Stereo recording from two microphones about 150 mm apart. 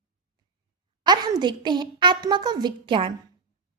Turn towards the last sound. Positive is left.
turn(degrees=-35)  # may be behind; listen again after turning